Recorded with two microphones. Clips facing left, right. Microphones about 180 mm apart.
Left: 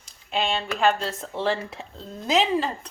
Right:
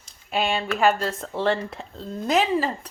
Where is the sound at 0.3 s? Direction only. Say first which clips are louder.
Right 2 dB; 5° right (ahead or behind).